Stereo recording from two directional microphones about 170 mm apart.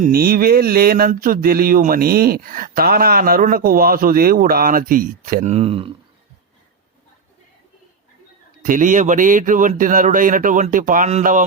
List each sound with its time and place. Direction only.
0.0 s speech: 60° right (ahead or behind)
5.5 s speech: 35° right (ahead or behind)
8.6 s speech: 50° right (ahead or behind)